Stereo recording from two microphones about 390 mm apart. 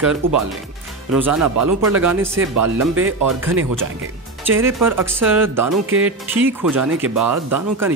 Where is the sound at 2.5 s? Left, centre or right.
Right.